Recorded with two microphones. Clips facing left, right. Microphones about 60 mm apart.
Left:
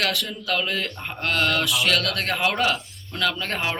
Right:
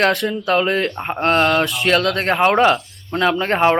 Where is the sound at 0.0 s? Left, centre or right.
Right.